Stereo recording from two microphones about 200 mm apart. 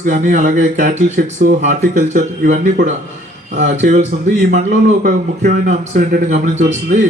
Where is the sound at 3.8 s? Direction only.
40° right (ahead or behind).